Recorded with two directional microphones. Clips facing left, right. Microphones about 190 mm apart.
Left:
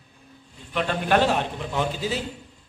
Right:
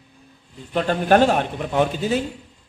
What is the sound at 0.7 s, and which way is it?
A man's voice, 40° right (ahead or behind).